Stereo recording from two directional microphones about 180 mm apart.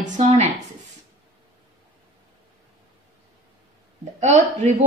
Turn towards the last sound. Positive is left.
turn(degrees=-40)  # may be behind; listen again after turning